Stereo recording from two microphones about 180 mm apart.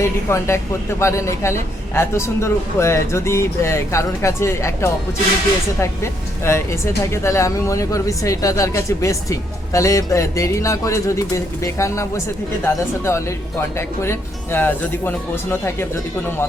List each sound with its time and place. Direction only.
0.0 s speech: 15° left (ahead or behind)